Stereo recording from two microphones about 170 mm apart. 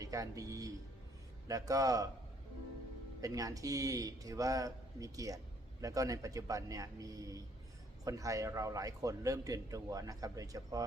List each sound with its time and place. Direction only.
0.0 s a man's voice: 20° right (ahead or behind)
3.2 s a man's voice: 20° right (ahead or behind)